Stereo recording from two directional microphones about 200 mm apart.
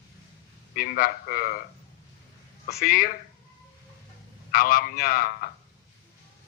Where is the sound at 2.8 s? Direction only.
45° left (ahead or behind).